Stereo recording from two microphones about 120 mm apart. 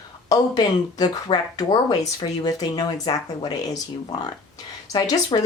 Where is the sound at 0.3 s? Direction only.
30° left (ahead or behind).